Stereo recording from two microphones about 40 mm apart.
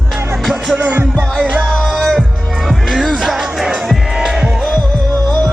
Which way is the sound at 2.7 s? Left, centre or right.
Centre.